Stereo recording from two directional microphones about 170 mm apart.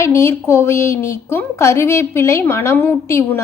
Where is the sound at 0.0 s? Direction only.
15° left (ahead or behind).